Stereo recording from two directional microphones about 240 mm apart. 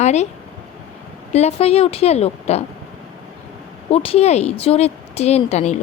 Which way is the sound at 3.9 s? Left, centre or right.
Left.